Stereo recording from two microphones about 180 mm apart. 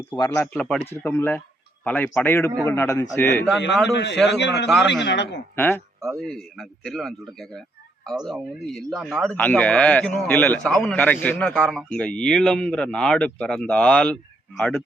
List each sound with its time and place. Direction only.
0.5 s a man's voice: 5° left (ahead or behind)
3.9 s a man's voice: 75° left (ahead or behind)
5.5 s speech: 10° left (ahead or behind)
6.0 s a man's voice: centre (ahead or behind)